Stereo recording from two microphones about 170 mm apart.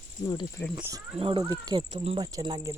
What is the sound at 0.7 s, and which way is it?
Speech, 15° right (ahead or behind).